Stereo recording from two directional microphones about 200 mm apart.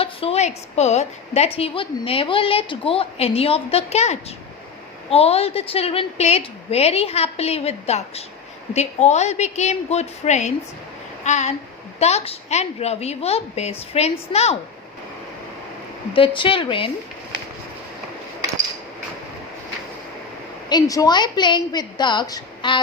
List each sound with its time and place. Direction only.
0.0 s a woman's voice: 30° left (ahead or behind)
11.2 s a sound: 35° left (ahead or behind)
11.9 s a woman's voice: 30° left (ahead or behind)
16.1 s a woman's voice: 25° left (ahead or behind)
20.7 s a woman's voice: 20° left (ahead or behind)